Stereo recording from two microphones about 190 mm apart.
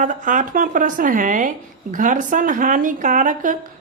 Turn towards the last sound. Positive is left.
turn(degrees=-45)  # may be behind; listen again after turning